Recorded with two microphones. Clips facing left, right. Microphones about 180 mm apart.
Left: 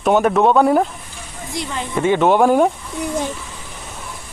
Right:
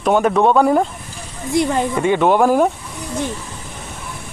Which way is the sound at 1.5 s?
55° right (ahead or behind).